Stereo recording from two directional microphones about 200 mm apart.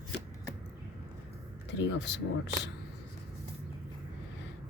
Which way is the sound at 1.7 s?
60° left (ahead or behind).